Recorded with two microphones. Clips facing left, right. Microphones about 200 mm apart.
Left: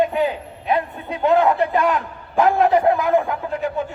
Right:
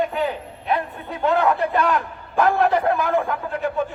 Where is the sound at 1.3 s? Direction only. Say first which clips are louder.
Left 3 dB; 20° left (ahead or behind).